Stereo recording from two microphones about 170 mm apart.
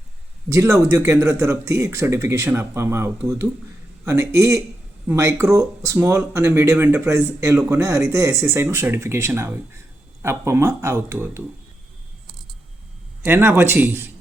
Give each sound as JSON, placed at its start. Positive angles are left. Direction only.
{"t": 0.5, "sound": "speech", "side_deg": -15}
{"t": 13.2, "sound": "speech", "side_deg": -15}